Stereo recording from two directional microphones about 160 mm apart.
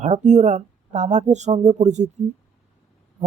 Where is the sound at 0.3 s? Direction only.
45° right (ahead or behind).